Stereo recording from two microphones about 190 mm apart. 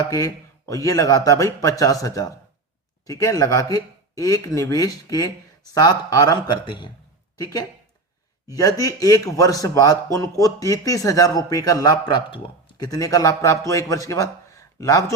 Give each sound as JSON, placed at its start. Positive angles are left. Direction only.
{"t": 0.1, "sound": "a man's voice", "side_deg": 20}
{"t": 8.8, "sound": "a man's voice", "side_deg": 20}